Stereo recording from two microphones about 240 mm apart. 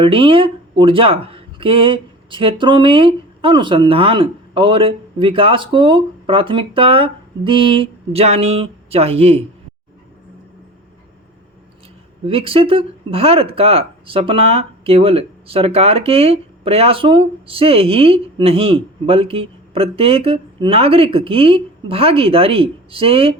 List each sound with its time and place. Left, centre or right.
0.0 s speech: right
12.2 s speech: right